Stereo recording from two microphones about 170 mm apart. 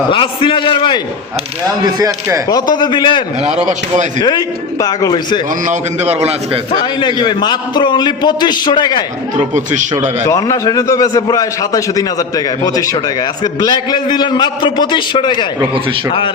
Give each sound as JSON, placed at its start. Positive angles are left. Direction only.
{"t": 0.1, "sound": "a man's voice", "side_deg": 30}
{"t": 1.8, "sound": "speech", "side_deg": -20}
{"t": 2.5, "sound": "a man's voice", "side_deg": 25}
{"t": 5.6, "sound": "a man's voice", "side_deg": -40}
{"t": 7.0, "sound": "a man's voice", "side_deg": 25}
{"t": 10.2, "sound": "a man's voice", "side_deg": 20}